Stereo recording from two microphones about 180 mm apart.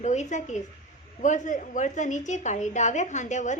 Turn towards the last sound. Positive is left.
turn(degrees=40)  # may be behind; listen again after turning